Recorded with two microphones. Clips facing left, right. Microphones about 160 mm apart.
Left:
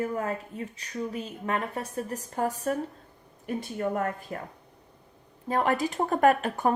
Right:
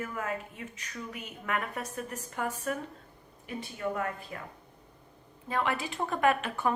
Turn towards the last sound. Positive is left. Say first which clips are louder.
# left 5 dB
turn(degrees=40)  # may be behind; listen again after turning